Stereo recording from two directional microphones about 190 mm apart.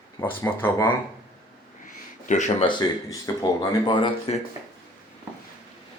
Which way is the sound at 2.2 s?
40° left (ahead or behind).